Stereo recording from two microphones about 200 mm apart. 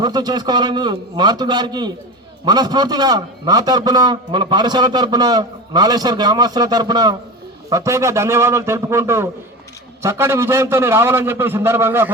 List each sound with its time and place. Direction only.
0.0 s a man's voice: 20° right (ahead or behind)